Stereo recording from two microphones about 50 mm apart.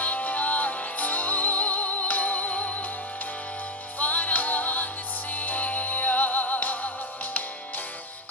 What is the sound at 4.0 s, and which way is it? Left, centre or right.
Music, left.